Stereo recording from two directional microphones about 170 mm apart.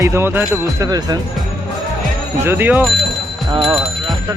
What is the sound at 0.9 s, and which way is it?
Speech, 20° right (ahead or behind).